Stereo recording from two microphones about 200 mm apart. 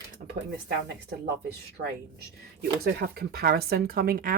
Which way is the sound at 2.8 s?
50° right (ahead or behind).